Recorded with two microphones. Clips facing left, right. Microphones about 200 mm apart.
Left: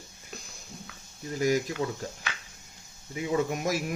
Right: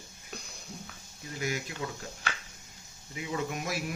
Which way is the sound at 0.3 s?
Centre (ahead or behind).